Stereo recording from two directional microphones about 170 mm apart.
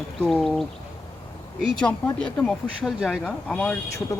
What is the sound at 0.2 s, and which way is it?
Speech, 5° left (ahead or behind).